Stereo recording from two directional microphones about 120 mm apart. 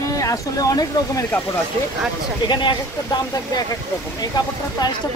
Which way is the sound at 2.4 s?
40° left (ahead or behind).